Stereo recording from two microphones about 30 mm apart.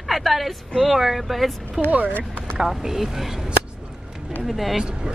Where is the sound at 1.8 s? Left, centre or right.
Right.